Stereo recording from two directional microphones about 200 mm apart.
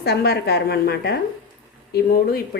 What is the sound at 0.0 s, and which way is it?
A woman's voice, 55° left (ahead or behind).